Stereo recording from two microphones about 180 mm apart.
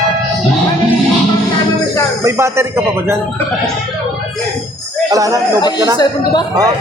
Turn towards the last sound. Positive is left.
turn(degrees=25)  # may be behind; listen again after turning